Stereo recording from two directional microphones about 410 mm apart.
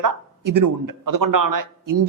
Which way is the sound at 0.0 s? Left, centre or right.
Right.